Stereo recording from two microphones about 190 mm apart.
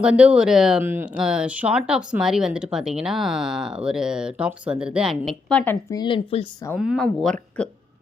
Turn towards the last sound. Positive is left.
turn(degrees=5)  # may be behind; listen again after turning